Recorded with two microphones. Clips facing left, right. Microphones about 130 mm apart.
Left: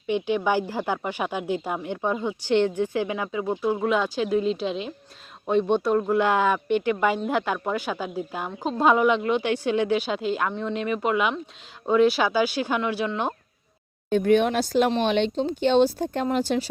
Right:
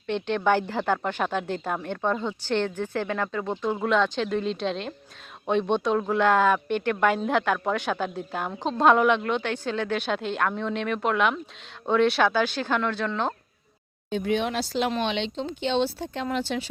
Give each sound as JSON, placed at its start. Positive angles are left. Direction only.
{"t": 0.1, "sound": "a woman's voice", "side_deg": 10}
{"t": 14.1, "sound": "speech", "side_deg": 50}